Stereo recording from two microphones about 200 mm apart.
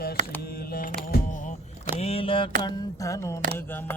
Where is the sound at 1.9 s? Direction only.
30° left (ahead or behind).